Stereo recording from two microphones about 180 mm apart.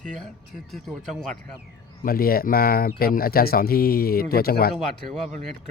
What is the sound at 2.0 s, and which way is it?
Speech, 55° left (ahead or behind).